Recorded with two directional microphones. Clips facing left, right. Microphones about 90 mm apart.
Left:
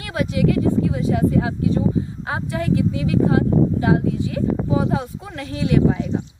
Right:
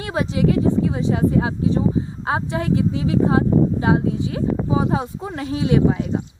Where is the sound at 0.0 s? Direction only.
30° right (ahead or behind).